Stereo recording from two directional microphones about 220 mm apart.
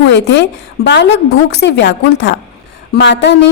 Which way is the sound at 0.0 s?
55° left (ahead or behind).